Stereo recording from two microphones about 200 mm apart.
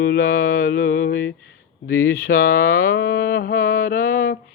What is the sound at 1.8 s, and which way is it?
Speech, 45° left (ahead or behind).